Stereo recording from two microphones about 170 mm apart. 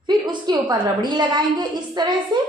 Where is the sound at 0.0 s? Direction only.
25° right (ahead or behind).